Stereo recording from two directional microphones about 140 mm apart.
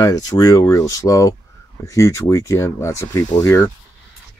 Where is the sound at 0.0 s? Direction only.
25° left (ahead or behind).